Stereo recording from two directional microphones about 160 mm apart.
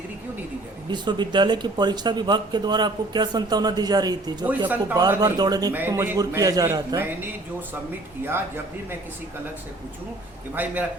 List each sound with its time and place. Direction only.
0.9 s speech: 25° right (ahead or behind)
5.7 s speech: 15° right (ahead or behind)
8.2 s speech: 15° right (ahead or behind)
10.5 s speech: 10° right (ahead or behind)